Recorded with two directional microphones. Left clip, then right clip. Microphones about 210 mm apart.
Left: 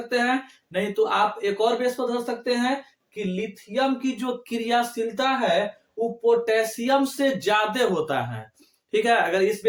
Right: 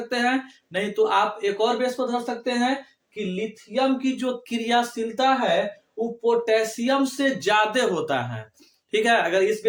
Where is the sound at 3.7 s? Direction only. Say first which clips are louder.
Right 1 dB; 10° right (ahead or behind).